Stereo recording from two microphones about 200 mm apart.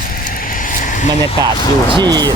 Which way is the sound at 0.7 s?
40° left (ahead or behind).